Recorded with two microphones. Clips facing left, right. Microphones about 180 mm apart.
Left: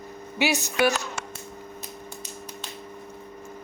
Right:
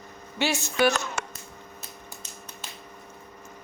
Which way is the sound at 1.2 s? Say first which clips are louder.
Right 2 dB; 55° right (ahead or behind).